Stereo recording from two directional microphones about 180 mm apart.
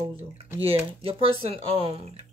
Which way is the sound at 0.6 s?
30° right (ahead or behind).